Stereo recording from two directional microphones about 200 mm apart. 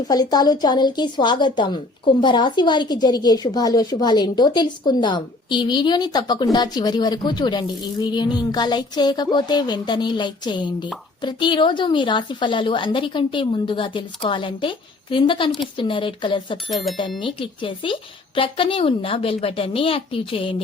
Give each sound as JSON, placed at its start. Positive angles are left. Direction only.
{"t": 0.1, "sound": "a woman's voice", "side_deg": 20}